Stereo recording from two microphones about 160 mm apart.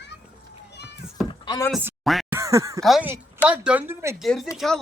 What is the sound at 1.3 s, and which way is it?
Door, 25° left (ahead or behind).